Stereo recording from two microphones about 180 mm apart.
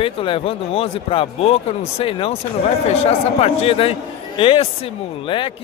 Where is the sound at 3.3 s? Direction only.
35° left (ahead or behind).